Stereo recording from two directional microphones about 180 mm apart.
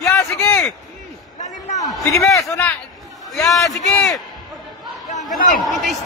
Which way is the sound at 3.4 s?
Centre (ahead or behind).